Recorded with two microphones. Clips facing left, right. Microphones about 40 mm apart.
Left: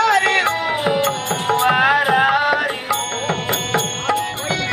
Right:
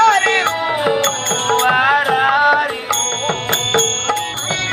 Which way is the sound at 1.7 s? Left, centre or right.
Centre.